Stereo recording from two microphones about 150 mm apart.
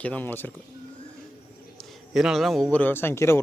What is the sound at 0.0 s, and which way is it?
Speech, 10° left (ahead or behind).